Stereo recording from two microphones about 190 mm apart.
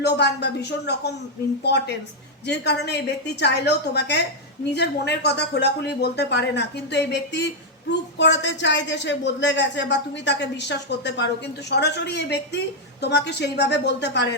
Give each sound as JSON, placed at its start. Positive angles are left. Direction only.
{"t": 0.0, "sound": "speech", "side_deg": 60}